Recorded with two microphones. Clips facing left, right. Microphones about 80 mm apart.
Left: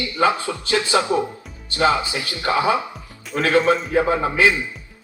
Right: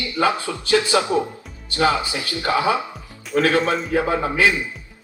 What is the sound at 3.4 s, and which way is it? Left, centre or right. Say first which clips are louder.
A man's voice: left 5 dB; left.